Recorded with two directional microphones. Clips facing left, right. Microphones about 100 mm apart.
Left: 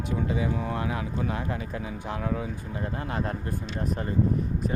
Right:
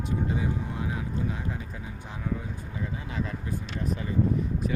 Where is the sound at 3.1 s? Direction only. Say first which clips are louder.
Left 2 dB; 55° left (ahead or behind).